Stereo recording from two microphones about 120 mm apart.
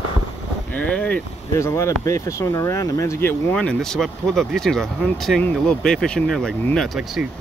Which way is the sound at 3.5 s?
5° left (ahead or behind).